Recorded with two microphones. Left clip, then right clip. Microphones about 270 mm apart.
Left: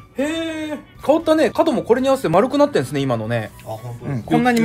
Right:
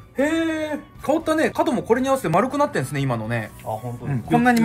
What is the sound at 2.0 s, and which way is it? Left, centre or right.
Speech, left.